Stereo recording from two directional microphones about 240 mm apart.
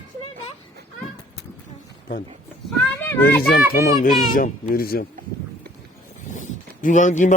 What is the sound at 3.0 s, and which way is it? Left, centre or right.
Children playing, centre.